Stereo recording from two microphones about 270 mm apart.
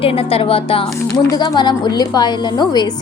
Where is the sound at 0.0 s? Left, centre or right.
Left.